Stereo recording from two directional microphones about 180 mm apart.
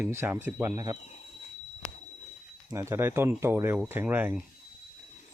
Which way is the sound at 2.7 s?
15° right (ahead or behind).